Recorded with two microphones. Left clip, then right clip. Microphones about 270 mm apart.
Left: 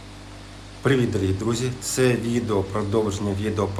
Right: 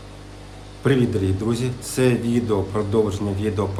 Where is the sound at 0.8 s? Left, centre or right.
Centre.